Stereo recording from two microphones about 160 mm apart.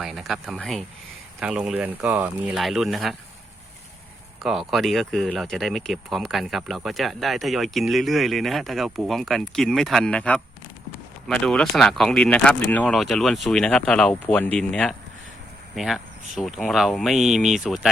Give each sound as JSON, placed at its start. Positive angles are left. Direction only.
{"t": 0.0, "sound": "speech", "side_deg": 0}
{"t": 4.4, "sound": "speech", "side_deg": 0}